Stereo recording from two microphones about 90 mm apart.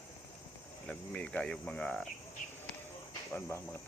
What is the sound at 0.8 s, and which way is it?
Speech, 10° left (ahead or behind).